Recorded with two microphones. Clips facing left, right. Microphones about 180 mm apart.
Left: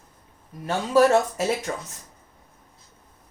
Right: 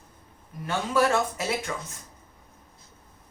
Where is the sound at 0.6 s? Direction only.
35° left (ahead or behind).